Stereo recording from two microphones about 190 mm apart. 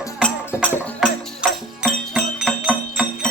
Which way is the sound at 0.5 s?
15° left (ahead or behind).